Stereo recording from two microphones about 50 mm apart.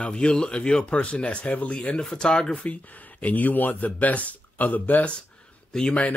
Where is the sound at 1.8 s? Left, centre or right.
Centre.